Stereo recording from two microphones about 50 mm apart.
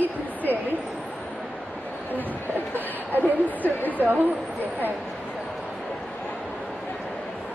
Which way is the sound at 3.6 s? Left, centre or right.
Left.